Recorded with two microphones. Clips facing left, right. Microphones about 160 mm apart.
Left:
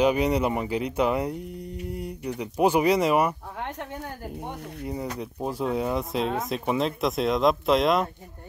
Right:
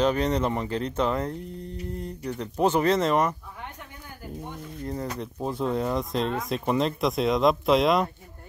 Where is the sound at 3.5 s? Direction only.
75° left (ahead or behind).